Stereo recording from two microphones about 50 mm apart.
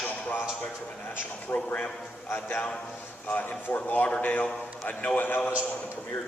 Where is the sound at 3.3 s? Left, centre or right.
Left.